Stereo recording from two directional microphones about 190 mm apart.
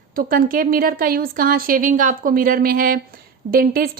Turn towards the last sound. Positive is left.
turn(degrees=-50)  # may be behind; listen again after turning